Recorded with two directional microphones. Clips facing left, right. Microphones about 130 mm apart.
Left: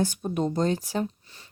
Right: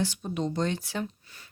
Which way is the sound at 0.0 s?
45° left (ahead or behind).